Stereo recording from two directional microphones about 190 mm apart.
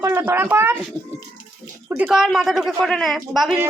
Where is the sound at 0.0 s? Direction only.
15° right (ahead or behind).